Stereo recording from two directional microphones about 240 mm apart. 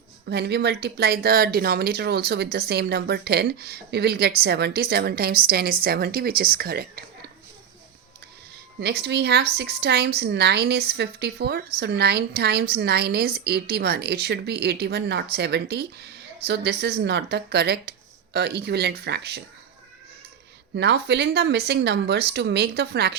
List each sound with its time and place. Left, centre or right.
0.3 s speech: right
8.8 s a woman's voice: right
20.7 s a woman's voice: right